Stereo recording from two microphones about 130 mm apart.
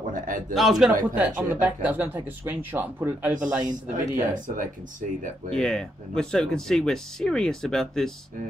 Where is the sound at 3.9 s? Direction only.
90° right.